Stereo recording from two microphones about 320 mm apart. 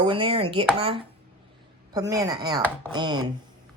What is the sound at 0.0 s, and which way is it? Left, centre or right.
Speech, centre.